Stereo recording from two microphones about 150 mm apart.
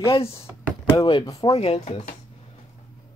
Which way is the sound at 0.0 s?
40° left (ahead or behind).